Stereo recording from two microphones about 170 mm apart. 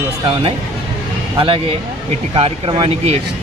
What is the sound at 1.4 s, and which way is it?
Speech, 30° right (ahead or behind).